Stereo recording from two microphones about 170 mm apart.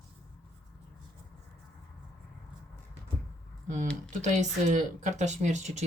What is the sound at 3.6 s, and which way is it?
Speech, 50° right (ahead or behind).